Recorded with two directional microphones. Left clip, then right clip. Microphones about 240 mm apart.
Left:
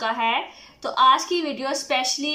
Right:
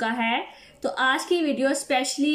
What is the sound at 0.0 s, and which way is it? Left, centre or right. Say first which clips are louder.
Speech: left 2 dB; centre.